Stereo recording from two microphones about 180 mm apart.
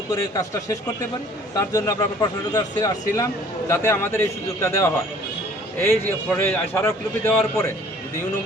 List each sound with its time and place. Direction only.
0.1 s a man's voice: 20° left (ahead or behind)
5.9 s a man's voice: 15° left (ahead or behind)